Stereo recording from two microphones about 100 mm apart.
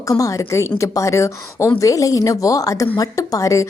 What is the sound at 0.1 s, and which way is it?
A woman's voice, 35° left (ahead or behind).